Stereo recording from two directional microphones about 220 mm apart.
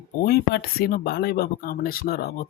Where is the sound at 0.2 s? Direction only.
45° left (ahead or behind).